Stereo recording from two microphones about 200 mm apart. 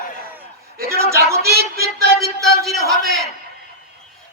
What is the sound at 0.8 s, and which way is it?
Speech, 15° right (ahead or behind).